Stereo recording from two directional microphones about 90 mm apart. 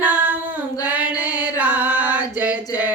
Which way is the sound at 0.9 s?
15° right (ahead or behind).